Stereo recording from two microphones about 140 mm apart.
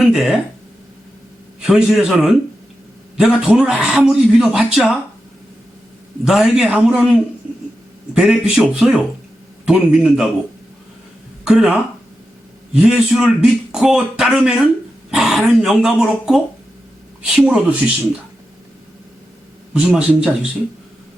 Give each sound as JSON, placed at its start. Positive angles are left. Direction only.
{"t": 0.0, "sound": "speech", "side_deg": -5}
{"t": 1.6, "sound": "speech", "side_deg": -5}
{"t": 6.2, "sound": "speech", "side_deg": -5}
{"t": 11.4, "sound": "speech", "side_deg": -5}
{"t": 19.7, "sound": "speech", "side_deg": -5}